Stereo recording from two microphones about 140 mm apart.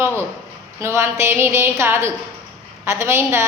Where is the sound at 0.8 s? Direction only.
20° right (ahead or behind).